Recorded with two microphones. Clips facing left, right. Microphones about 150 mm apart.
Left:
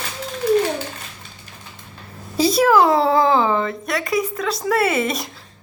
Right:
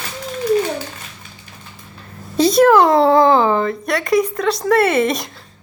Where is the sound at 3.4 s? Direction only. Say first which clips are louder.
Right 3 dB; 35° right (ahead or behind).